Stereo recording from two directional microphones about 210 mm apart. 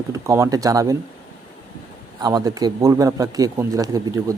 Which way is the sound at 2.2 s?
20° right (ahead or behind).